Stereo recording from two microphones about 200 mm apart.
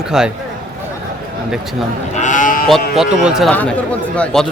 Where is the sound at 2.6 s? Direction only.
Centre (ahead or behind).